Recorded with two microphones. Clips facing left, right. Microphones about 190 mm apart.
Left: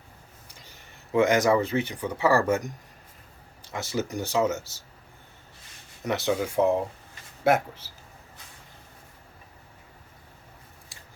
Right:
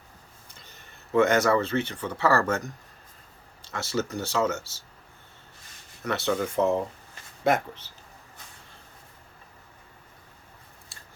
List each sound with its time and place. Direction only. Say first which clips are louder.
0.5 s speech: right 1 dB; 15° left (ahead or behind)
6.1 s speech: left 1 dB; 15° left (ahead or behind)